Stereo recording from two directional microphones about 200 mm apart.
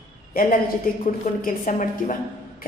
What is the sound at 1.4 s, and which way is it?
Speech, 40° left (ahead or behind).